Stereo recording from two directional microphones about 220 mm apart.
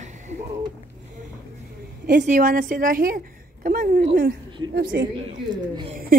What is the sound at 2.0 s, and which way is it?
A child's voice, 35° right (ahead or behind).